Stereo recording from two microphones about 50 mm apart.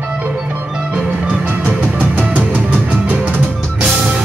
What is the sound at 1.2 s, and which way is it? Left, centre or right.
Music, right.